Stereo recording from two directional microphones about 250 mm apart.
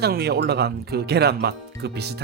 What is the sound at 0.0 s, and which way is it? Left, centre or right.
Speech, right.